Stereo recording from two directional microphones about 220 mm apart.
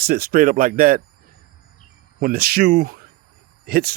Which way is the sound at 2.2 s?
40° right (ahead or behind).